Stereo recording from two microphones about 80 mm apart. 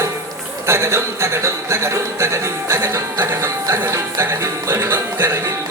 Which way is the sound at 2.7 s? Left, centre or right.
Right.